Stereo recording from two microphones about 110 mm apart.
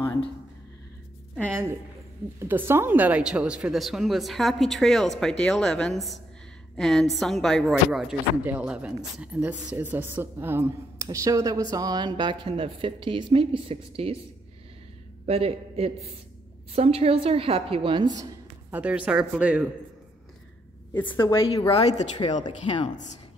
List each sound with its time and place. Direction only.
2.3 s a woman's voice: 20° right (ahead or behind)
11.1 s a woman's voice: 30° right (ahead or behind); by 14.1 s 60° right (ahead or behind)
15.2 s a woman's voice: 65° right (ahead or behind)
18.7 s a woman's voice: 15° right (ahead or behind)
20.9 s a woman's voice: 15° left (ahead or behind)
21.5 s speech: 35° left (ahead or behind)
22.4 s speech: 50° left (ahead or behind)